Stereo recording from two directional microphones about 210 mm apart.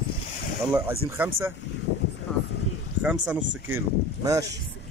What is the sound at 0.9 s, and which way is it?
Speech, 10° right (ahead or behind).